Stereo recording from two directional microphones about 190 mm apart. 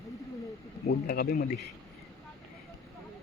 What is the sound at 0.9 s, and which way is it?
Speech, 50° left (ahead or behind).